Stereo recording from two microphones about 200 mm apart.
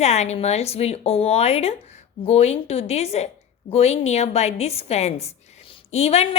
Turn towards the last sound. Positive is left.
turn(degrees=30)  # may be behind; listen again after turning